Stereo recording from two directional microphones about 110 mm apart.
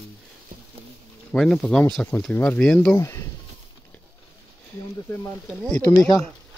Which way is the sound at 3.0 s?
25° left (ahead or behind).